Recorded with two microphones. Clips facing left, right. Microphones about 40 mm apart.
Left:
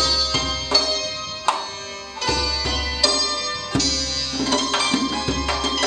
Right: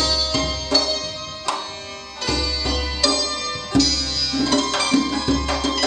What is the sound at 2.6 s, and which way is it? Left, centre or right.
Music, left.